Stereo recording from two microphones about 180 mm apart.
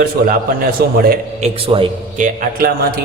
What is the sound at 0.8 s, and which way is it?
Speech, 60° right (ahead or behind).